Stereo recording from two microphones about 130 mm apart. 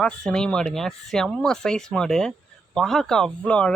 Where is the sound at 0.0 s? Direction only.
5° left (ahead or behind).